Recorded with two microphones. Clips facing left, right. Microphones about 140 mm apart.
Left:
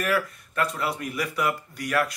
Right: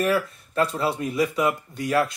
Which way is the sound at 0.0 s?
30° right (ahead or behind).